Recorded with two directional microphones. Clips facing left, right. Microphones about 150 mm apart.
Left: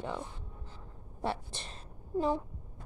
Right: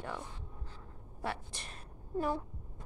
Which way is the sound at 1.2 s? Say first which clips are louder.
Left 4 dB; 30° left (ahead or behind).